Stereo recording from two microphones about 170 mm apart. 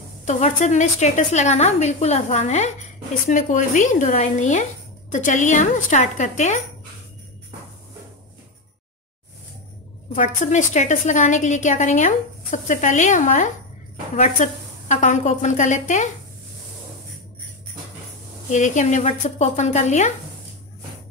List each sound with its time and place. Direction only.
0.2 s a woman's voice: 45° left (ahead or behind)
10.1 s a woman's voice: 45° left (ahead or behind)
18.5 s a woman's voice: 45° left (ahead or behind)